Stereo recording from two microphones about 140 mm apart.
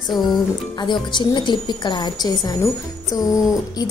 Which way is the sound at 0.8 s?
35° left (ahead or behind).